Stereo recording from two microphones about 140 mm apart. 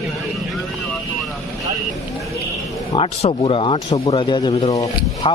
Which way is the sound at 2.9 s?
40° left (ahead or behind).